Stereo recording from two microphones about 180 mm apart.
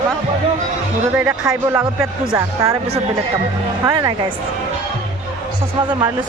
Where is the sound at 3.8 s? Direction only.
20° right (ahead or behind).